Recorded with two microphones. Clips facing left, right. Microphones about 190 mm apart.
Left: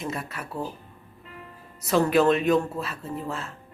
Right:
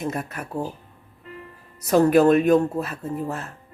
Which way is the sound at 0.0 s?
45° right (ahead or behind).